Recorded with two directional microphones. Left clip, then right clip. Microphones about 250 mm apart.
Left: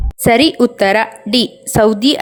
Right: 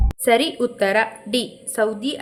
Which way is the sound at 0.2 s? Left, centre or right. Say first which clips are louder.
Left 7 dB; left.